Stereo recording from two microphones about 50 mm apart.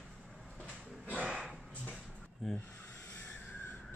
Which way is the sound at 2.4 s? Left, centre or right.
Centre.